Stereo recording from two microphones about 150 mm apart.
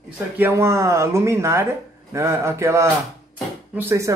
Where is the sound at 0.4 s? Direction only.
15° right (ahead or behind).